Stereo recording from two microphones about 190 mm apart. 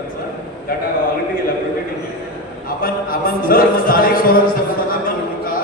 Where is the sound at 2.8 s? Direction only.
50° left (ahead or behind).